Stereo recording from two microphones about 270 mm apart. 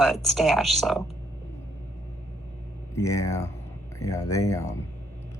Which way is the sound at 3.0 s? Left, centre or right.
Centre.